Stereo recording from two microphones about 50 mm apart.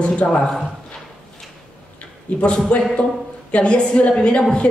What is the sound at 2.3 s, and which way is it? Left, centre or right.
A woman's voice, left.